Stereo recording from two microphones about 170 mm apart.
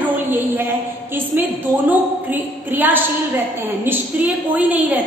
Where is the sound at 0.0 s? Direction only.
10° right (ahead or behind).